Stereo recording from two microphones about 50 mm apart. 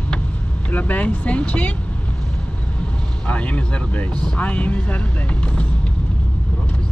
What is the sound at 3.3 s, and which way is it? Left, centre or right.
Speech, left.